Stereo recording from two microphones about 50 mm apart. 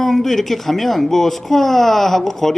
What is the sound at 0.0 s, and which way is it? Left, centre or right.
Speech, centre.